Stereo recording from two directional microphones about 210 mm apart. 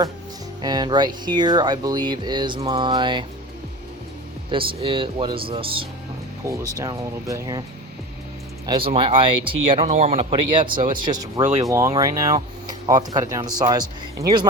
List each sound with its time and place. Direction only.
0.6 s speech: 20° right (ahead or behind)
4.4 s speech: 25° right (ahead or behind)
6.5 s speech: 15° right (ahead or behind)
8.6 s speech: 25° right (ahead or behind)